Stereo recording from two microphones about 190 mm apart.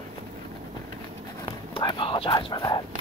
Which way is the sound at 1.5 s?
25° left (ahead or behind).